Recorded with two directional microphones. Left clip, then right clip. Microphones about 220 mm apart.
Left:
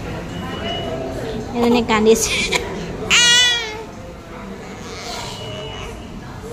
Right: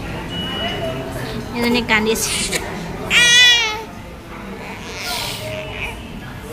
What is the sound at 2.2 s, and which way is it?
Speech, 15° left (ahead or behind).